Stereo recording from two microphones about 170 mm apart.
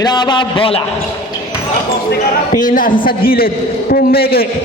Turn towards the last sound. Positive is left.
turn(degrees=65)  # may be behind; listen again after turning